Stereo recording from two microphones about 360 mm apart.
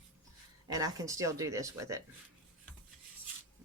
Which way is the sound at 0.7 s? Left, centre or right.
Centre.